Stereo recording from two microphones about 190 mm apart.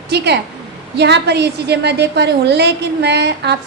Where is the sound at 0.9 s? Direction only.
60° right (ahead or behind).